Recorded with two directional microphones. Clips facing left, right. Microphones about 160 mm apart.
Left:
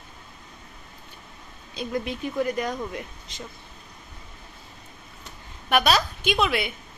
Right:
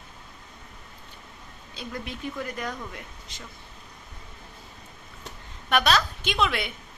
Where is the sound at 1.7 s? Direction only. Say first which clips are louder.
Left 7 dB; 15° left (ahead or behind).